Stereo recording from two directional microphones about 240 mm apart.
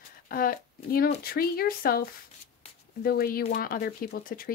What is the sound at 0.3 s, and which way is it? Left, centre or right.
Speech, left.